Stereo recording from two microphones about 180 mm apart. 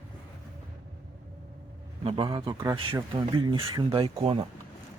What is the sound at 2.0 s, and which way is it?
Speech, 30° right (ahead or behind).